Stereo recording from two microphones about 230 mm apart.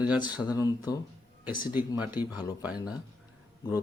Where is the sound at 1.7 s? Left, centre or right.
Centre.